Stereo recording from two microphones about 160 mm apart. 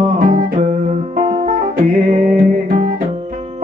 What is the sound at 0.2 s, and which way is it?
Music, 45° right (ahead or behind).